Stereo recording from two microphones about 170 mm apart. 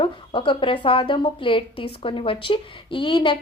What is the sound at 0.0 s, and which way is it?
A woman's voice, 30° left (ahead or behind).